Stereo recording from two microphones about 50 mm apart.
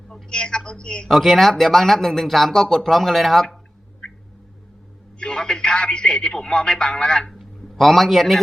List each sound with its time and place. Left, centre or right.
0.1 s speech: centre
1.0 s speech: centre
5.2 s speech: centre
7.3 s a sound: centre